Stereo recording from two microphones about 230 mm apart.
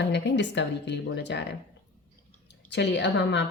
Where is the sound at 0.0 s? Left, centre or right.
Left.